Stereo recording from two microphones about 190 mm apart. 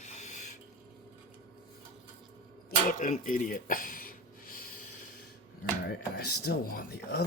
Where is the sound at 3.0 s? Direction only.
45° left (ahead or behind).